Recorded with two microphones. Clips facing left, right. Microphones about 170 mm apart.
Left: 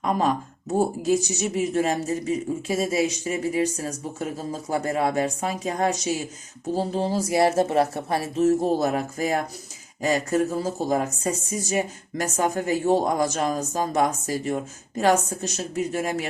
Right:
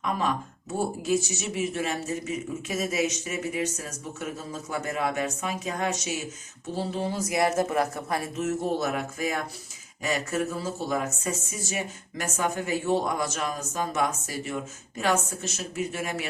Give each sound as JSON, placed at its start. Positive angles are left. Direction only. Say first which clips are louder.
{"t": 0.0, "sound": "speech", "louder": "left 5 dB", "side_deg": 35}